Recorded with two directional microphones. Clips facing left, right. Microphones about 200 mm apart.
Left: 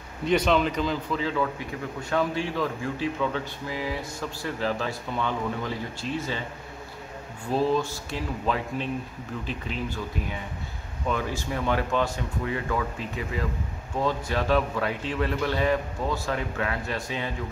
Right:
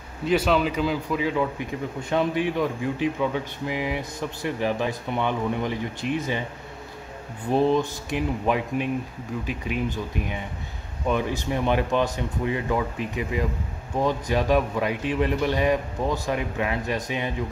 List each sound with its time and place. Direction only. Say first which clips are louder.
0.2 s speech: right 1 dB; 5° right (ahead or behind)
7.5 s speech: right 3 dB; 20° right (ahead or behind)